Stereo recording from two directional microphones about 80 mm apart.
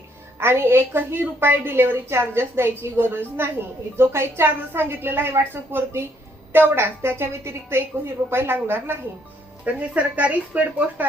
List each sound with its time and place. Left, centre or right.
0.3 s a woman's voice: right
9.6 s a woman's voice: centre